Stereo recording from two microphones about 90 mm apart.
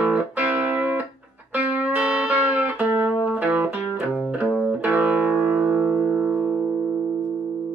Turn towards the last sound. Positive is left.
turn(degrees=-15)  # may be behind; listen again after turning